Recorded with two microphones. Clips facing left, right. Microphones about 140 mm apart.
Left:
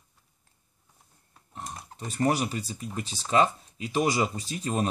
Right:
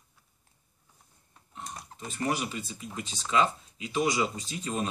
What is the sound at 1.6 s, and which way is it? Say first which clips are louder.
Speech: left 2 dB; 35° left (ahead or behind).